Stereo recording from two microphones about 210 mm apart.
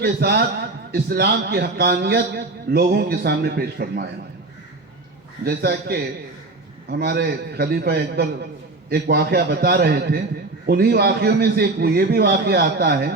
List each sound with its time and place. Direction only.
0.0 s a man's voice: 50° right (ahead or behind)
5.5 s a man's voice: 50° right (ahead or behind)